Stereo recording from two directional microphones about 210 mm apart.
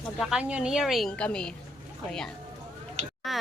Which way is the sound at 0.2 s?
5° right (ahead or behind).